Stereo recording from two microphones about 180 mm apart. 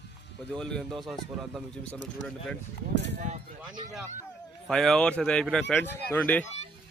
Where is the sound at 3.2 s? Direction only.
40° right (ahead or behind).